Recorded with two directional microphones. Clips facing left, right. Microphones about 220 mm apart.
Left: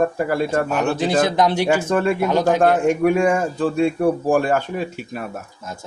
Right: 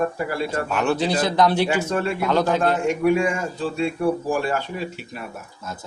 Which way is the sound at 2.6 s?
50° left (ahead or behind).